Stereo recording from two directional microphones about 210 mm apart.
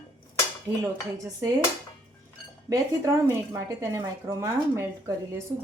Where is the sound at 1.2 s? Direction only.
15° right (ahead or behind).